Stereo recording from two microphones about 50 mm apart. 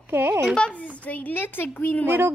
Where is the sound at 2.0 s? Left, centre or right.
Right.